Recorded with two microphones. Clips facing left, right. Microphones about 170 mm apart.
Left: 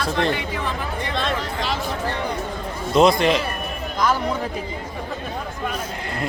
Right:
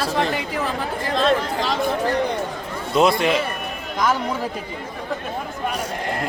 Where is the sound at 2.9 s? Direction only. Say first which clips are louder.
Left 2 dB; 5° right (ahead or behind).